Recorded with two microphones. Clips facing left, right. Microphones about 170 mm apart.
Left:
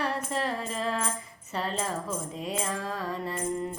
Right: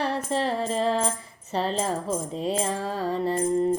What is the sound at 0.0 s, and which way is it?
Music, 30° right (ahead or behind).